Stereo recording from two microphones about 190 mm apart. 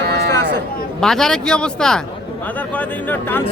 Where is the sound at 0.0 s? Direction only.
60° right (ahead or behind).